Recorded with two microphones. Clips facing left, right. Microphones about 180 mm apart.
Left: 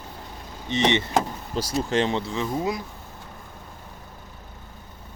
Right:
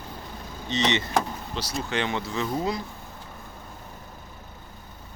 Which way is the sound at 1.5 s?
40° left (ahead or behind).